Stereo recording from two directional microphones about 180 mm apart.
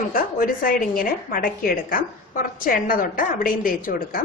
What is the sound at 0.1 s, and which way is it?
A woman's voice, 50° left (ahead or behind).